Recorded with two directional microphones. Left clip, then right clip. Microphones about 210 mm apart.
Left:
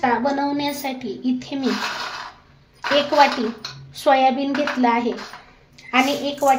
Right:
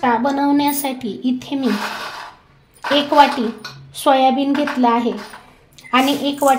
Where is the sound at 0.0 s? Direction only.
35° right (ahead or behind).